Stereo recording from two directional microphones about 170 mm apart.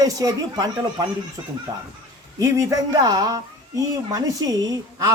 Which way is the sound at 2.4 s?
20° right (ahead or behind).